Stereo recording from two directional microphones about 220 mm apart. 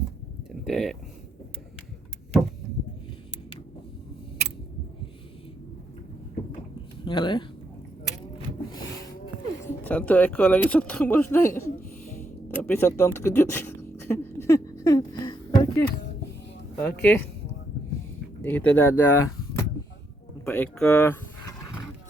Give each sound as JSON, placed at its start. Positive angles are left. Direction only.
{"t": 0.6, "sound": "speech", "side_deg": 0}
{"t": 7.0, "sound": "speech", "side_deg": 20}
{"t": 9.8, "sound": "speech", "side_deg": 5}
{"t": 12.5, "sound": "a sound", "side_deg": 10}
{"t": 16.7, "sound": "speech", "side_deg": 5}
{"t": 18.4, "sound": "speech", "side_deg": 5}